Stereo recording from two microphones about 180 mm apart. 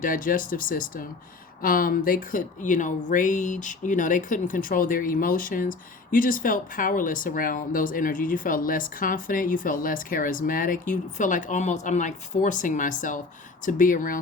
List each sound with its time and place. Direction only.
0.0 s speech: 50° left (ahead or behind)